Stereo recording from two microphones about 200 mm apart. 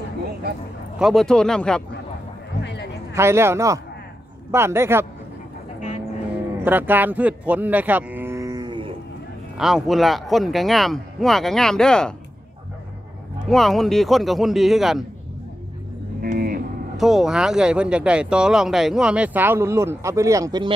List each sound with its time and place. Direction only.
0.9 s speech: centre (ahead or behind)
2.6 s a sound: 60° left (ahead or behind)
3.1 s a man's voice: 15° right (ahead or behind)
6.6 s speech: 10° right (ahead or behind)
9.6 s speech: centre (ahead or behind)
13.5 s speech: centre (ahead or behind)
16.2 s vehicle: 50° right (ahead or behind)
16.9 s speech: centre (ahead or behind); by 20.7 s 20° right (ahead or behind)